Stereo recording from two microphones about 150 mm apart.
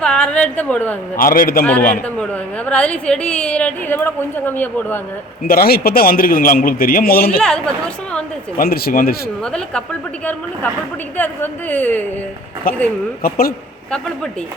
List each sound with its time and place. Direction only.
0.0 s a woman's voice: 5° left (ahead or behind)
1.1 s a man's voice: 75° left (ahead or behind)
2.1 s speech: 5° left (ahead or behind)
5.4 s a man's voice: 80° left
7.4 s a woman's voice: 5° left (ahead or behind)
8.5 s speech: 85° left
9.4 s a woman's voice: 5° left (ahead or behind)
11.2 s speech: 10° left (ahead or behind)
13.2 s a man's voice: 75° left (ahead or behind)